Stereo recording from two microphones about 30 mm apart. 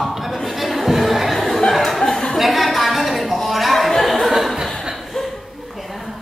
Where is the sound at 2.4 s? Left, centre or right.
Centre.